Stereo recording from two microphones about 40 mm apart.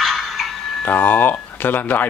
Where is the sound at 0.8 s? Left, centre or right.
Left.